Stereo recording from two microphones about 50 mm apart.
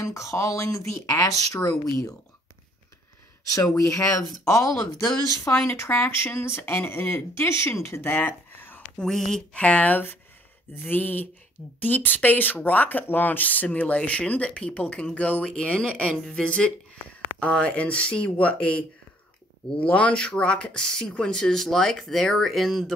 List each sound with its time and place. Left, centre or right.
0.0 s speech: left
3.7 s speech: left
5.5 s speech: left
5.9 s speech: left
7.3 s speech: left
8.1 s a sound: left
8.9 s speech: centre
9.3 s speech: left; by 22.9 s centre